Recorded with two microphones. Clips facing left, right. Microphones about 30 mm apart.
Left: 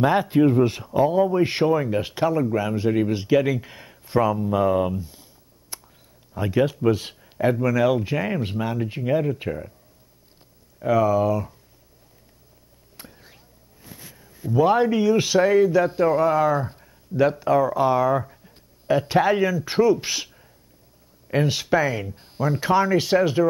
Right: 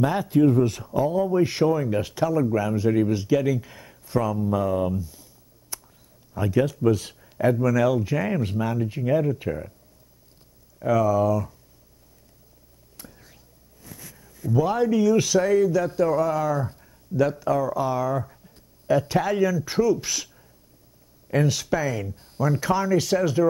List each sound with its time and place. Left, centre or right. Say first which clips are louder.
0.0 s speech: left 2 dB; left
9.5 s speech: even; centre
10.8 s speech: left 1 dB; left
12.9 s speech: left 2 dB; left